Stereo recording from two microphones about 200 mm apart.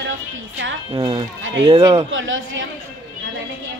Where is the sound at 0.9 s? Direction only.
20° right (ahead or behind).